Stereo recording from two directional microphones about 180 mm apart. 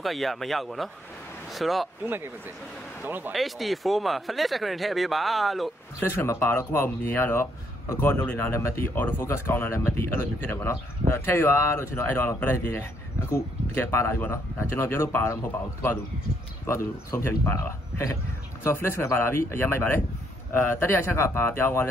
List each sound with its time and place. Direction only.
0.0 s speech: centre (ahead or behind)
2.0 s speech: 10° right (ahead or behind)
5.9 s speech: 15° left (ahead or behind)
16.6 s speech: 15° left (ahead or behind)